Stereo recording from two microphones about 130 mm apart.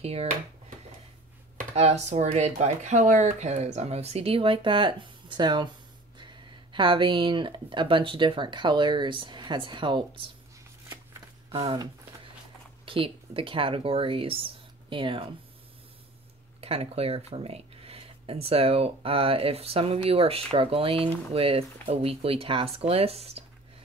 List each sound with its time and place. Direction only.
0.0 s speech: 50° right (ahead or behind)
1.8 s speech: 55° right (ahead or behind); by 10.2 s 40° right (ahead or behind)
12.8 s speech: 45° right (ahead or behind)
16.6 s speech: 50° right (ahead or behind)